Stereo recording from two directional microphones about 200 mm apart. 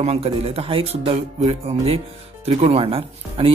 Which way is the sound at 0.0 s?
30° right (ahead or behind).